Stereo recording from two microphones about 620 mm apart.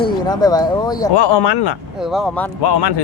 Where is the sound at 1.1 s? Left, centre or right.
Left.